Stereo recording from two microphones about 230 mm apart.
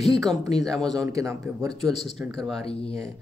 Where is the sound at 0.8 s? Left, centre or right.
Centre.